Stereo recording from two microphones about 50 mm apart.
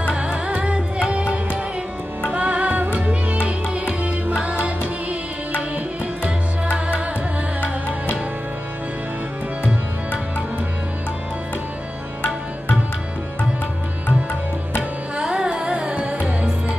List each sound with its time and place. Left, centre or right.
0.1 s music: right
6.2 s music: right
14.8 s music: centre